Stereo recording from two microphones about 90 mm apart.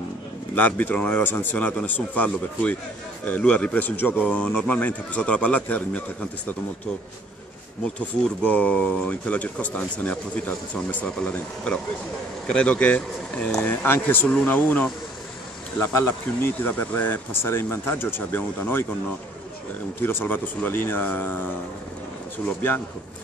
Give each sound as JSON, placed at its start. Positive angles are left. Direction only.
{"t": 0.6, "sound": "speech", "side_deg": 20}
{"t": 8.5, "sound": "speech", "side_deg": 15}
{"t": 20.0, "sound": "speech", "side_deg": 25}